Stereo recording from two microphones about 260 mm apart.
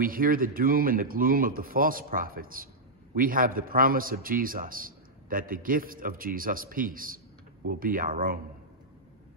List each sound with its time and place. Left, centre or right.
0.0 s a man's voice: right